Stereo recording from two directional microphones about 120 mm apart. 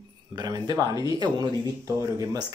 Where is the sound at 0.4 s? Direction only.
35° right (ahead or behind).